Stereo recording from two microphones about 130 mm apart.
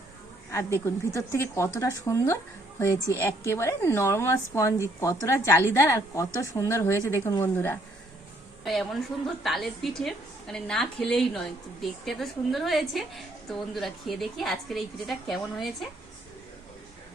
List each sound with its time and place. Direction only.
0.5 s speech: 20° left (ahead or behind)
8.6 s a woman's voice: centre (ahead or behind)